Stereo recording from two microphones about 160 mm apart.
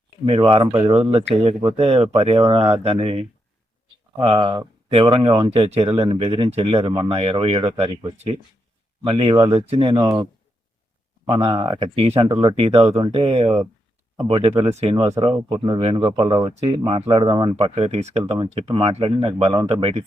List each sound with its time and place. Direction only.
0.3 s speech: 35° right (ahead or behind)
1.5 s speech: 40° right (ahead or behind)
11.3 s speech: 30° right (ahead or behind)
14.9 s speech: 25° right (ahead or behind)